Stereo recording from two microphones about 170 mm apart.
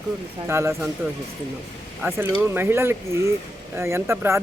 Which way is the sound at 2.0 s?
10° right (ahead or behind).